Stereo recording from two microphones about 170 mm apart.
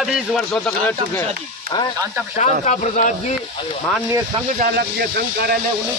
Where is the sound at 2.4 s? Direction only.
45° left (ahead or behind).